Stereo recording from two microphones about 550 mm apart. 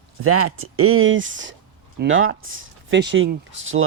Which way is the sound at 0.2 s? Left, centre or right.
Right.